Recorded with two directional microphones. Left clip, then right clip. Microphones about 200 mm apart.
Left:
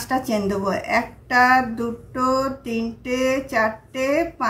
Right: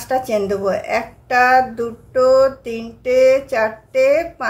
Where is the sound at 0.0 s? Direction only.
25° right (ahead or behind).